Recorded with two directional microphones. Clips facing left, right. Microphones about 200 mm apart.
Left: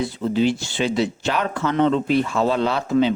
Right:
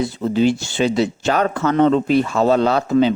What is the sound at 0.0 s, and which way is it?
Speech, 45° right (ahead or behind).